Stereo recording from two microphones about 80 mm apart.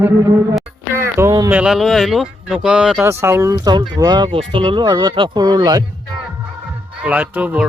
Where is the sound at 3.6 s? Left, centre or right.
Right.